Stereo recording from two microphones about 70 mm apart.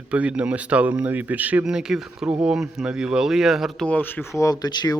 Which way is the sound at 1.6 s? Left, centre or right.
Centre.